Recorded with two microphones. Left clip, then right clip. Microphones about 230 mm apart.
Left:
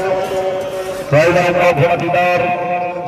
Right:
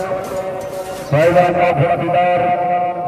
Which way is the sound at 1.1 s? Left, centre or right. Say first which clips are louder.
Even; left.